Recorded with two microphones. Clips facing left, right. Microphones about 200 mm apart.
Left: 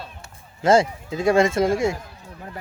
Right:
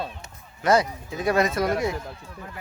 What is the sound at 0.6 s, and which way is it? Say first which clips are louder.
Speech: left 4 dB; 25° left (ahead or behind).